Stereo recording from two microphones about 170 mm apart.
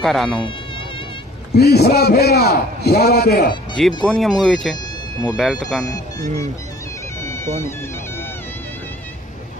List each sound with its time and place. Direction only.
0.0 s speech: centre (ahead or behind)
1.5 s a man's voice: 70° left (ahead or behind)
3.8 s speech: centre (ahead or behind)
5.9 s speech: 20° left (ahead or behind)